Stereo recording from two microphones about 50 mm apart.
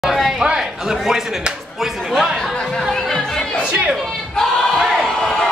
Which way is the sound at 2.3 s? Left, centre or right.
Centre.